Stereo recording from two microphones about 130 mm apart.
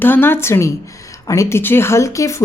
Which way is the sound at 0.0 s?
15° left (ahead or behind).